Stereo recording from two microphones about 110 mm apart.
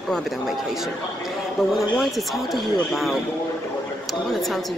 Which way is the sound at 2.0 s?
Centre (ahead or behind).